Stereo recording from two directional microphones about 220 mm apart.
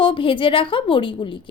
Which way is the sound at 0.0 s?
25° left (ahead or behind).